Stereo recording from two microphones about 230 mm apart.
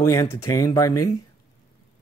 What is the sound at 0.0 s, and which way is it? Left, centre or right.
Speech, centre.